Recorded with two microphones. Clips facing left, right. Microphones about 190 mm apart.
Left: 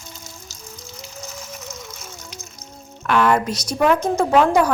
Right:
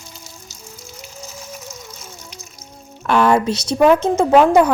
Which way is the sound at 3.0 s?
30° right (ahead or behind).